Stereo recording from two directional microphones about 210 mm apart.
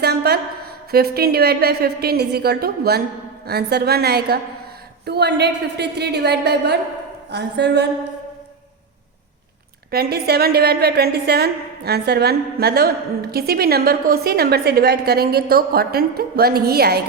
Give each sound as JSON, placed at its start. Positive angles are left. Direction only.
{"t": 0.0, "sound": "a woman's voice", "side_deg": -50}
{"t": 9.9, "sound": "a woman's voice", "side_deg": -50}